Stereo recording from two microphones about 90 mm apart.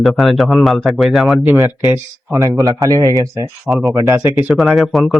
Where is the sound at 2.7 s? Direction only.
40° right (ahead or behind).